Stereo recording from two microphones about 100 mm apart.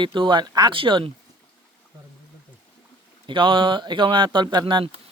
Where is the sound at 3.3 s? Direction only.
55° right (ahead or behind).